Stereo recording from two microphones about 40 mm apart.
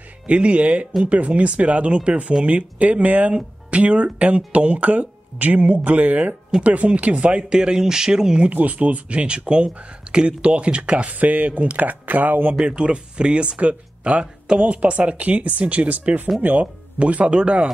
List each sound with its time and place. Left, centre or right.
0.3 s speech: right
7.4 s speech: centre
8.5 s speech: right
12.6 s speech: right
17.0 s speech: right